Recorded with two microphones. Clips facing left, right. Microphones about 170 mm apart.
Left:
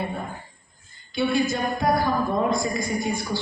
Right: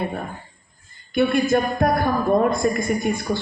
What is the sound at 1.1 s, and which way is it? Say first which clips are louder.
Speech: right 5 dB; 55° right (ahead or behind).